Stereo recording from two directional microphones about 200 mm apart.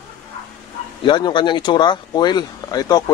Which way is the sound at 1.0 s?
25° left (ahead or behind).